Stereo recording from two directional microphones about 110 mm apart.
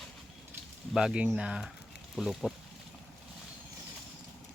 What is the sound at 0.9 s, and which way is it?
Speech, 5° right (ahead or behind).